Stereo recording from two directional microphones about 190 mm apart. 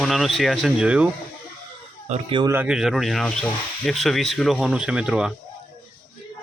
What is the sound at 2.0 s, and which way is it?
Speech, 35° right (ahead or behind).